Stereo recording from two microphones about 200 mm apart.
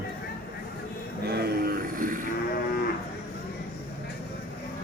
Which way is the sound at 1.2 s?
50° right (ahead or behind).